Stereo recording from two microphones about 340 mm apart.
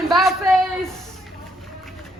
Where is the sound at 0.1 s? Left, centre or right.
Centre.